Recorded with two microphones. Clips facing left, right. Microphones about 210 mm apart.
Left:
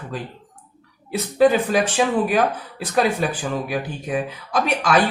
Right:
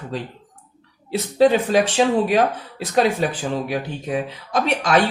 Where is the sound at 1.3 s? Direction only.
25° right (ahead or behind).